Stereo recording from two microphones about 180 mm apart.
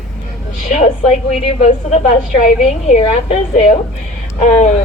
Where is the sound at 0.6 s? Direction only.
40° left (ahead or behind).